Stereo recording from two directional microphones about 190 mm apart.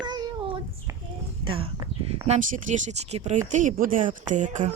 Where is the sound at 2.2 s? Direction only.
40° right (ahead or behind).